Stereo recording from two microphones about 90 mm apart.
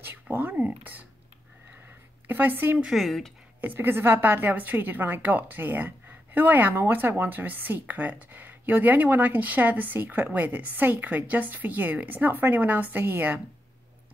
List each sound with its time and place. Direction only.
0.0 s speech: 20° right (ahead or behind)
2.2 s a woman's voice: 20° right (ahead or behind)
2.9 s speech: centre (ahead or behind)
3.6 s a woman's voice: 20° right (ahead or behind)